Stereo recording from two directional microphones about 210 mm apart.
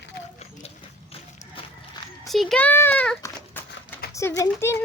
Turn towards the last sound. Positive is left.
turn(degrees=15)  # may be behind; listen again after turning